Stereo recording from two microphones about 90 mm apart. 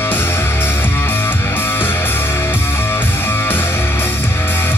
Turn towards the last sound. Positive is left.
turn(degrees=25)  # may be behind; listen again after turning